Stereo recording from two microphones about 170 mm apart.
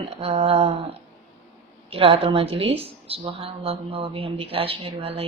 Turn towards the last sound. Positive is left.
turn(degrees=-35)  # may be behind; listen again after turning